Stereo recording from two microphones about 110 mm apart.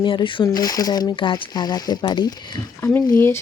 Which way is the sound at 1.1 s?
50° left (ahead or behind).